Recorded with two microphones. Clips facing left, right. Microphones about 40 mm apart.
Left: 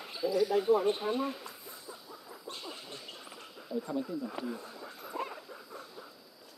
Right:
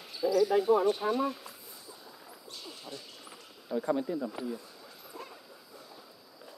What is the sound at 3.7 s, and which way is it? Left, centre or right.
Speech, right.